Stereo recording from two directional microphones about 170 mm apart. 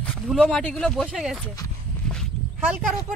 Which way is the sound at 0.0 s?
5° left (ahead or behind).